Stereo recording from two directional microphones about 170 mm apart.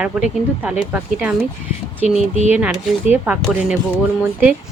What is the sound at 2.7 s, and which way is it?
Speech, 10° right (ahead or behind).